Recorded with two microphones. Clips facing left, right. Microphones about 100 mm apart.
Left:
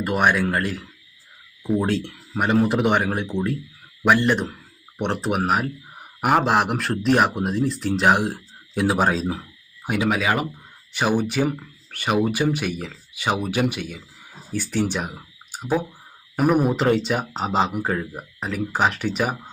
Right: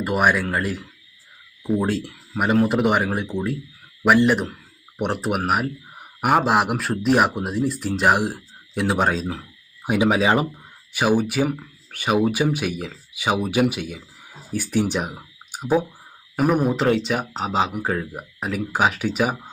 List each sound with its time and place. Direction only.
0.0 s speech: 5° right (ahead or behind)
9.8 s speech: 15° right (ahead or behind)
10.9 s speech: 10° right (ahead or behind)
16.3 s speech: centre (ahead or behind)